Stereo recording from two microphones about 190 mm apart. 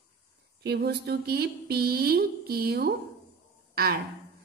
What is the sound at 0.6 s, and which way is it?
A woman's voice, 60° right (ahead or behind).